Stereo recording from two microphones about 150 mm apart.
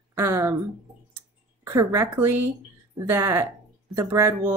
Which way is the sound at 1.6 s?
20° right (ahead or behind).